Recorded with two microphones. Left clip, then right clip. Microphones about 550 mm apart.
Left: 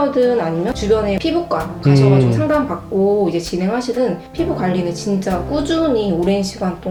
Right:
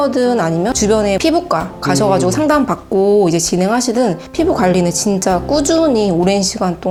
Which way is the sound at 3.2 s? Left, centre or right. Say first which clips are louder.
Right 5 dB; right.